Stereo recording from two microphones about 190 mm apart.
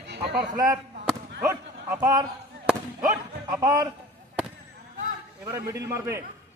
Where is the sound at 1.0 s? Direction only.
10° right (ahead or behind).